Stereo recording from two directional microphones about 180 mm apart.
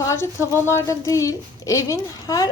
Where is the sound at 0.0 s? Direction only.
15° left (ahead or behind).